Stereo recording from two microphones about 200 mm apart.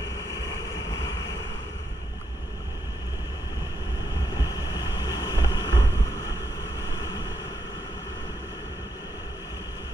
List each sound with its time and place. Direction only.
4.4 s boat: 20° left (ahead or behind)